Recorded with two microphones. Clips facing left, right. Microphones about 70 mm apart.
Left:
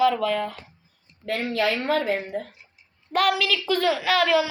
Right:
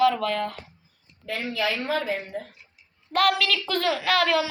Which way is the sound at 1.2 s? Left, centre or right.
Left.